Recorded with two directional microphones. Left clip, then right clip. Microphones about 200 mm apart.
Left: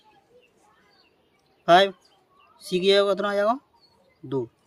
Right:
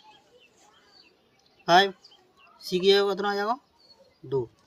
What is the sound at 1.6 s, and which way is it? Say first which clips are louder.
Speech: left 3 dB; 50° left (ahead or behind).